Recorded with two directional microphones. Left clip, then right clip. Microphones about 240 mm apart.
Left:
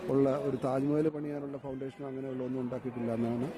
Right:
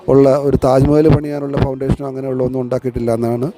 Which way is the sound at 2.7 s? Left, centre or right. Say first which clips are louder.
Right 19 dB; right.